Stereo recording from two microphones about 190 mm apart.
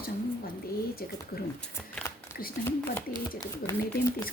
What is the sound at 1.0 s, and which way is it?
Speech, 50° left (ahead or behind).